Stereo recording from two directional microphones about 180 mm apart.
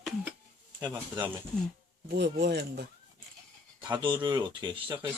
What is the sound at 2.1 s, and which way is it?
Speech, 65° right (ahead or behind).